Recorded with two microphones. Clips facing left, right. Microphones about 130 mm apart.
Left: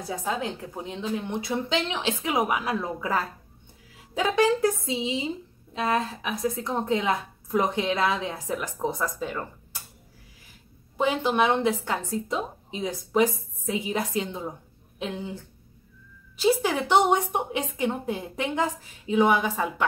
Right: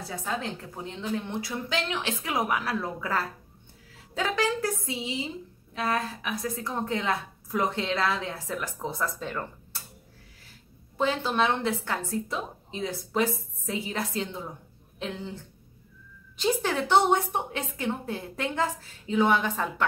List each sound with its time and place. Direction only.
0.1 s a woman's voice: 15° left (ahead or behind)
11.0 s a woman's voice: 15° left (ahead or behind)
16.3 s a woman's voice: 10° left (ahead or behind)